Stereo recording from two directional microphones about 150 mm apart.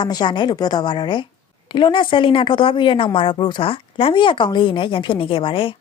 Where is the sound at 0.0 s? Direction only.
30° left (ahead or behind).